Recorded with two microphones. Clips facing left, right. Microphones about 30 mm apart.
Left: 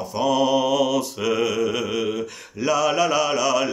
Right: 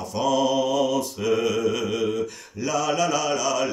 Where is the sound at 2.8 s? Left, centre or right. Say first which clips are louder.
Left 1 dB; left.